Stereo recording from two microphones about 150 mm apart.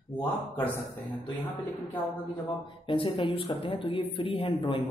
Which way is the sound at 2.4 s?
35° left (ahead or behind).